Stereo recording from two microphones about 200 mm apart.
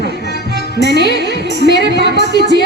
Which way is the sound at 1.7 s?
60° right (ahead or behind).